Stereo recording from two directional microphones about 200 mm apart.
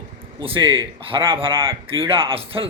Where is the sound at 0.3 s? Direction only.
25° right (ahead or behind).